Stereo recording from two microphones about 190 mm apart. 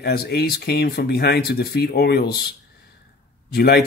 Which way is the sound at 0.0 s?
55° left (ahead or behind).